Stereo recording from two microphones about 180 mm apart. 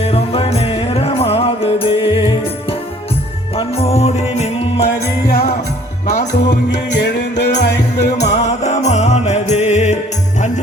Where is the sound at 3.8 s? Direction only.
35° left (ahead or behind).